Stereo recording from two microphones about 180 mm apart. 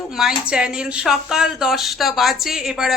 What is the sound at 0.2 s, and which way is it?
A woman's voice, 5° right (ahead or behind).